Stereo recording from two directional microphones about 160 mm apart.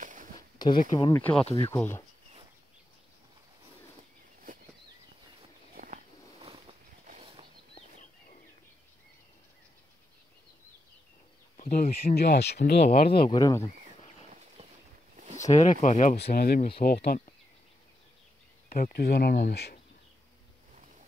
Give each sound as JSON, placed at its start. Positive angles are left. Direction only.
{"t": 0.0, "sound": "a sound", "side_deg": -55}
{"t": 0.6, "sound": "speech", "side_deg": 25}
{"t": 5.8, "sound": "walk", "side_deg": -60}
{"t": 11.5, "sound": "speech", "side_deg": 55}
{"t": 12.9, "sound": "speech", "side_deg": 75}
{"t": 13.2, "sound": "speech", "side_deg": 25}
{"t": 15.4, "sound": "speech", "side_deg": 45}
{"t": 16.2, "sound": "speech", "side_deg": 75}
{"t": 18.7, "sound": "speech", "side_deg": 60}
{"t": 19.5, "sound": "speech", "side_deg": 90}